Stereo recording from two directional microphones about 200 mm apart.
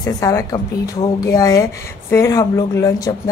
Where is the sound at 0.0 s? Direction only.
15° left (ahead or behind).